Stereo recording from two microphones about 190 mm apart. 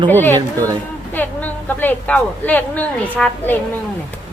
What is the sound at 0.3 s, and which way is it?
Speech, 20° right (ahead or behind).